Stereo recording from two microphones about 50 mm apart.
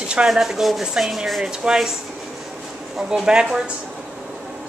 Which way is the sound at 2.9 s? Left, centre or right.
Centre.